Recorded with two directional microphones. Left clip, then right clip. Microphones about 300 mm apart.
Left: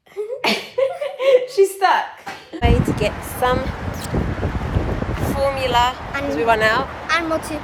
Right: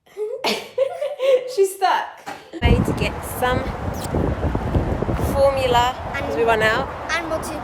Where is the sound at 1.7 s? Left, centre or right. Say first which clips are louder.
Left 2 dB; centre.